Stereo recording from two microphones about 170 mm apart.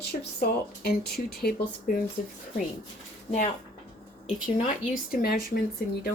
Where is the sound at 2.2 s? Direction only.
55° left (ahead or behind).